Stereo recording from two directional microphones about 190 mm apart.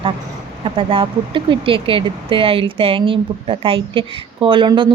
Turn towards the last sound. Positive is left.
turn(degrees=-25)  # may be behind; listen again after turning